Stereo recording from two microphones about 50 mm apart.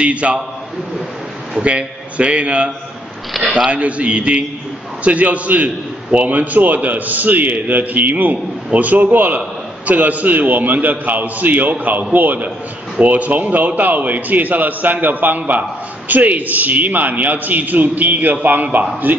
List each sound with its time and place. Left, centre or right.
0.0 s a man's voice: right
1.6 s a man's voice: right